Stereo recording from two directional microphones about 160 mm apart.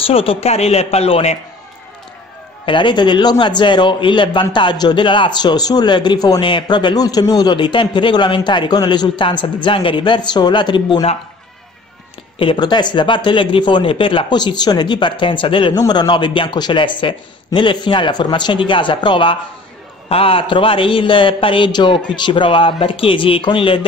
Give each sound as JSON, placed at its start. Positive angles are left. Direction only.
{"t": 0.0, "sound": "a man's voice", "side_deg": 35}
{"t": 2.6, "sound": "a man's voice", "side_deg": 30}
{"t": 12.4, "sound": "a man's voice", "side_deg": 30}